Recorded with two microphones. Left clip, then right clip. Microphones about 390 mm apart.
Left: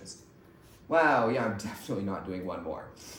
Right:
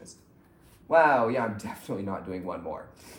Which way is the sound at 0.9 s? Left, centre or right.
Right.